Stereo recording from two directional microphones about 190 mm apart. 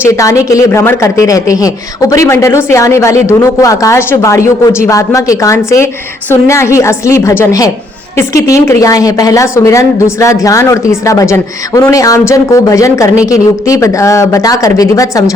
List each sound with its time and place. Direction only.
0.0 s a woman's voice: 15° left (ahead or behind)